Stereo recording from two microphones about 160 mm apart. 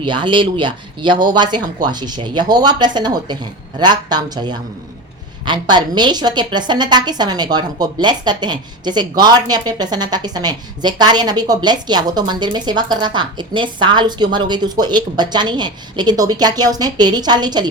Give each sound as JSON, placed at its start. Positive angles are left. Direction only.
{"t": 0.0, "sound": "a woman's voice", "side_deg": -30}